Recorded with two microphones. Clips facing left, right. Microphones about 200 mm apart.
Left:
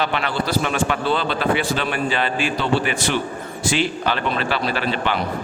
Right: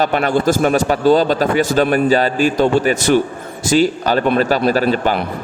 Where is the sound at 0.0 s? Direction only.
45° right (ahead or behind).